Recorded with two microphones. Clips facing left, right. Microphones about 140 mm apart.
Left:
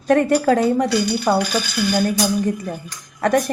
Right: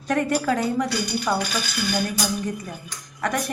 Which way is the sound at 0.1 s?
50° left (ahead or behind).